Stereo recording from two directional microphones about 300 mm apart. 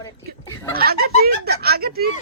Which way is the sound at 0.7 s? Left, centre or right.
Right.